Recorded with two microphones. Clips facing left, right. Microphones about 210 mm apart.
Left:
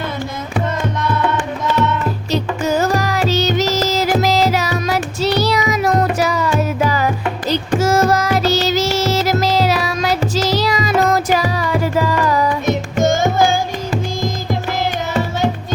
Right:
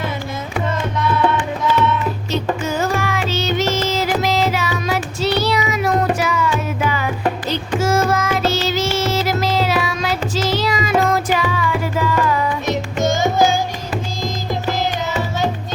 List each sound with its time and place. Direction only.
2.3 s music: 40° left (ahead or behind)